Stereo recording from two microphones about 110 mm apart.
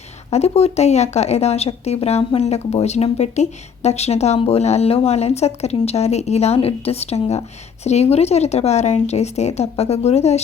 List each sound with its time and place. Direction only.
0.3 s speech: 75° left (ahead or behind); by 3.4 s 90° left
3.8 s speech: 75° left (ahead or behind)